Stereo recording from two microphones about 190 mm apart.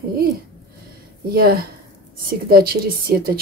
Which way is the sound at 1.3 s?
55° right (ahead or behind).